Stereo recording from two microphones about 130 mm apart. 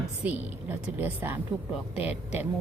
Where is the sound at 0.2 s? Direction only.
10° right (ahead or behind).